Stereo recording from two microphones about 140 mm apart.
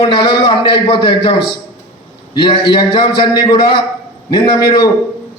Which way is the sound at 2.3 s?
35° left (ahead or behind).